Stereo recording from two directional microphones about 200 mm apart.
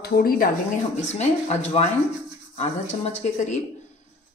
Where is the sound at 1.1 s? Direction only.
35° left (ahead or behind).